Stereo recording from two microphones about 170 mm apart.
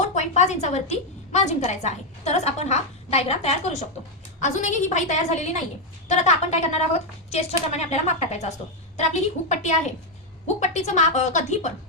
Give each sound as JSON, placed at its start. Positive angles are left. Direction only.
{"t": 0.0, "sound": "a woman's voice", "side_deg": 40}